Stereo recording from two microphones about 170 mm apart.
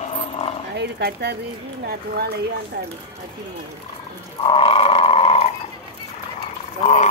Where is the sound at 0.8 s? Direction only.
75° right (ahead or behind).